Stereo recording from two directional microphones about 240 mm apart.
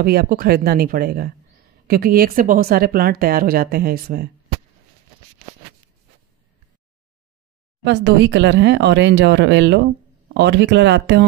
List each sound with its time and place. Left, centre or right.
0.0 s a woman's voice: right
7.8 s speech: right